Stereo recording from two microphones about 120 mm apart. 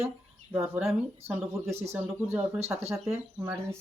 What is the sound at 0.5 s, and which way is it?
Speech, 20° right (ahead or behind).